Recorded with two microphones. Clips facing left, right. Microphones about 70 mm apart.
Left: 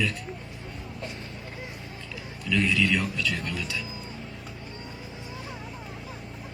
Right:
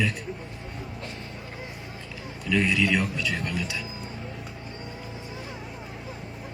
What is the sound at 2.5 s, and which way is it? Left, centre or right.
A man's voice, right.